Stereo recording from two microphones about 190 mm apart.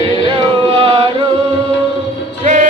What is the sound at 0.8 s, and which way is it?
Chant, 25° right (ahead or behind).